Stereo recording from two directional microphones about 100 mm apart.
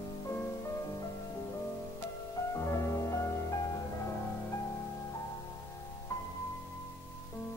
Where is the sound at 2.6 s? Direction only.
30° left (ahead or behind).